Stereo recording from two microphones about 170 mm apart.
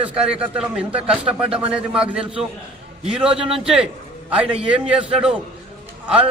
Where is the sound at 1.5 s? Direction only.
30° right (ahead or behind).